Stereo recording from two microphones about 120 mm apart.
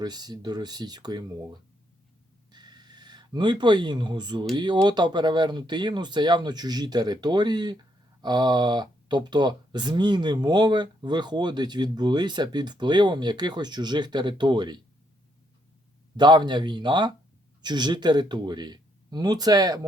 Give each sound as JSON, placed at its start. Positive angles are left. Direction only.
{"t": 0.0, "sound": "speech", "side_deg": -35}
{"t": 2.5, "sound": "a sound", "side_deg": -35}
{"t": 4.5, "sound": "speech", "side_deg": -40}
{"t": 16.1, "sound": "speech", "side_deg": -35}